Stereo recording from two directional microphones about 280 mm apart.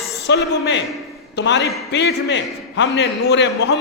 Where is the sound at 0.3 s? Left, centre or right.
Left.